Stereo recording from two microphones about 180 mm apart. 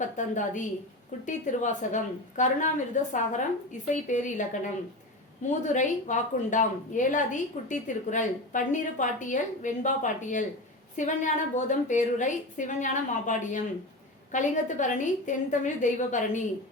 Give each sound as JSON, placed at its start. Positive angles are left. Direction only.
{"t": 0.0, "sound": "speech", "side_deg": 45}